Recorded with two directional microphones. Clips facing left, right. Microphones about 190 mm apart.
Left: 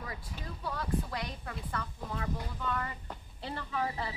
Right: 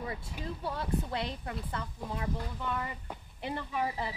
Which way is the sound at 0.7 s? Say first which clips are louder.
Even; 25° right (ahead or behind).